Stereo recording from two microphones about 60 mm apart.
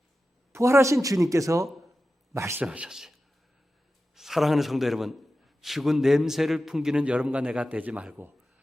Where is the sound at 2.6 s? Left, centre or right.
Centre.